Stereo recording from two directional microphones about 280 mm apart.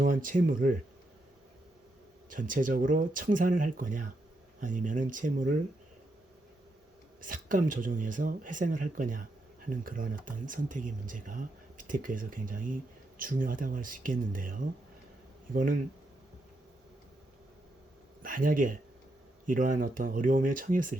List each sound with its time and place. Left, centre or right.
0.0 s speech: right
2.3 s speech: right
7.2 s speech: right
18.2 s speech: right